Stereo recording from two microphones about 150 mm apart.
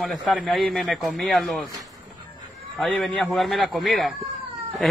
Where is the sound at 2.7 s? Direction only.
5° left (ahead or behind).